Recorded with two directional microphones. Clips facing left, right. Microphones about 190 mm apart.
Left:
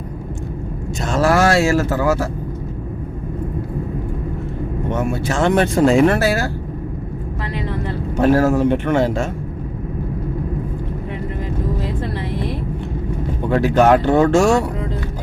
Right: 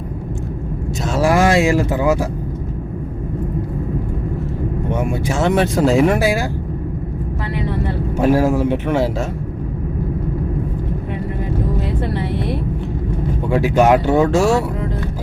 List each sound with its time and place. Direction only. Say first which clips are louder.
1.0 s speech: even; 10° right (ahead or behind)
4.9 s speech: left 1 dB; 10° right (ahead or behind)
8.2 s speech: left 1 dB; 10° right (ahead or behind)
13.5 s speech: even; 10° right (ahead or behind)